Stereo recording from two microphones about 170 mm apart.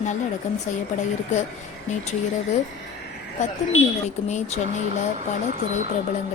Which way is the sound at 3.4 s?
45° left (ahead or behind).